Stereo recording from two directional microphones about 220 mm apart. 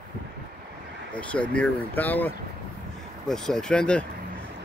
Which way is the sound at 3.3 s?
5° left (ahead or behind).